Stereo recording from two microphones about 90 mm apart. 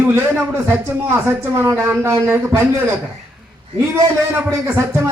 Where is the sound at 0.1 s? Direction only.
25° right (ahead or behind).